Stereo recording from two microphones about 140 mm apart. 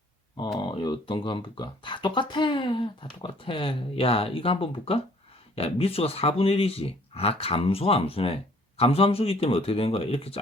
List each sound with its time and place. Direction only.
0.6 s speech: 35° left (ahead or behind)